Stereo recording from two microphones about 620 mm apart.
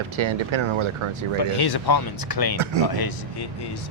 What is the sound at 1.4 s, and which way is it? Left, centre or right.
Speech, left.